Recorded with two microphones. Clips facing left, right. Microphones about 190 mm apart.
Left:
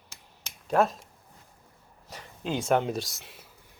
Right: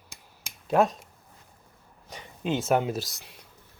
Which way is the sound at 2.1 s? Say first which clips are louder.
Right 3 dB; centre (ahead or behind).